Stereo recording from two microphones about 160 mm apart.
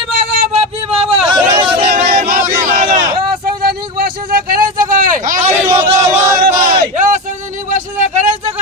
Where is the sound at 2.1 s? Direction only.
60° right (ahead or behind).